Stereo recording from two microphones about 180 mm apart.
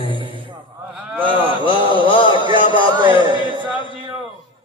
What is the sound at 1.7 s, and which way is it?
Mantra, 25° right (ahead or behind).